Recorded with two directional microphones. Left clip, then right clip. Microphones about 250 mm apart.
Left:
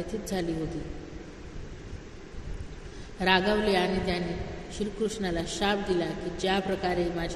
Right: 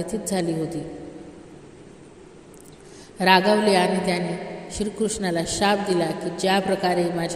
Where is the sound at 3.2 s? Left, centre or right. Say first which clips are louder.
Right 7 dB; right.